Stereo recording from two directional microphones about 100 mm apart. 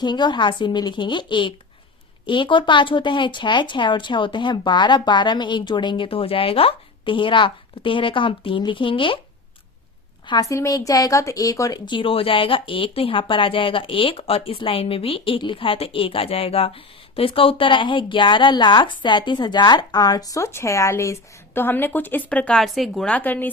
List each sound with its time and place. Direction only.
0.0 s a woman's voice: 50° left (ahead or behind)
10.4 s a woman's voice: 35° left (ahead or behind)
11.9 s speech: 60° left (ahead or behind); by 23.0 s centre (ahead or behind)
23.0 s speech: 15° left (ahead or behind)